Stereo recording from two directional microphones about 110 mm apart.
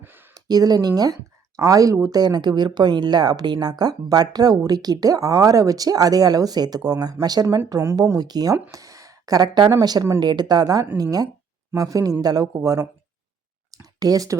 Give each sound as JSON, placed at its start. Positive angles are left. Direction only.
{"t": 0.3, "sound": "speech", "side_deg": -35}
{"t": 7.7, "sound": "speech", "side_deg": -25}
{"t": 13.7, "sound": "a sound", "side_deg": -35}